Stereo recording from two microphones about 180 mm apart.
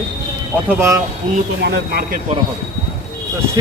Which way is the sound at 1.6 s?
60° right (ahead or behind).